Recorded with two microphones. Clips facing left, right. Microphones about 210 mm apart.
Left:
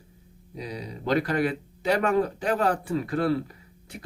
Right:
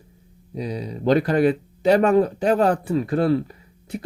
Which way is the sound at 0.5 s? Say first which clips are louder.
Right 7 dB; 25° right (ahead or behind).